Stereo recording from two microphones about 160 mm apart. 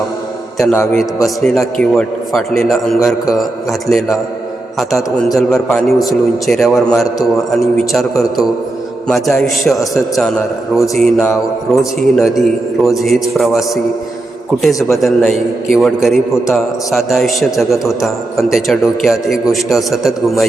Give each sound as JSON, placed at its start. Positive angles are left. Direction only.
{"t": 0.6, "sound": "a man's voice", "side_deg": 15}
{"t": 0.9, "sound": "a man's voice", "side_deg": 0}
{"t": 8.1, "sound": "a man's voice", "side_deg": 20}
{"t": 9.0, "sound": "a man's voice", "side_deg": 0}
{"t": 14.7, "sound": "a man's voice", "side_deg": 20}
{"t": 15.7, "sound": "a man's voice", "side_deg": 0}